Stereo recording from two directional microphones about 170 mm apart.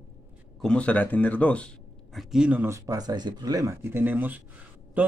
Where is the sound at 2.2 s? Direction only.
5° right (ahead or behind).